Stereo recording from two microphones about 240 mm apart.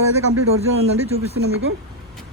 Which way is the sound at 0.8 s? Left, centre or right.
Right.